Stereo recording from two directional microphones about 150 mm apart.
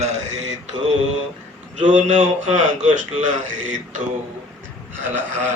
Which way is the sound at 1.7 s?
55° right (ahead or behind).